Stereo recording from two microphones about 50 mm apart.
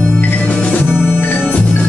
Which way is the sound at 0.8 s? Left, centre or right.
Left.